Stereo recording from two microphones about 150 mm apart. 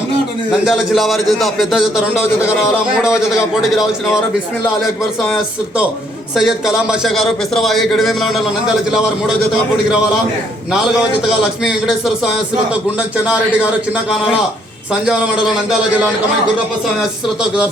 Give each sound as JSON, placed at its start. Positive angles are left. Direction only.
{"t": 0.5, "sound": "a man's voice", "side_deg": 0}
{"t": 5.2, "sound": "a man's voice", "side_deg": 0}
{"t": 11.3, "sound": "a man's voice", "side_deg": 0}